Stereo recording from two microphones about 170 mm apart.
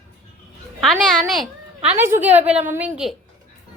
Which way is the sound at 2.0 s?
10° right (ahead or behind).